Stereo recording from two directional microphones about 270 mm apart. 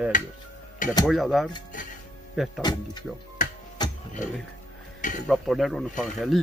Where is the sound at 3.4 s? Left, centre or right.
Left.